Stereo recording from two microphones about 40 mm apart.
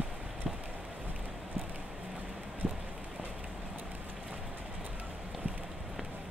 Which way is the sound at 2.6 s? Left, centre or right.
Centre.